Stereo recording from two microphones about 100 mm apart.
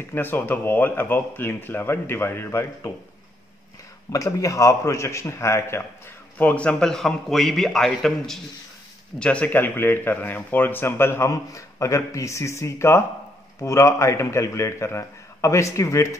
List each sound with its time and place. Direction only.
0.1 s a man's voice: 20° left (ahead or behind)
4.1 s a man's voice: 30° left (ahead or behind)
6.3 s a man's voice: 15° left (ahead or behind); by 16.2 s 30° left (ahead or behind)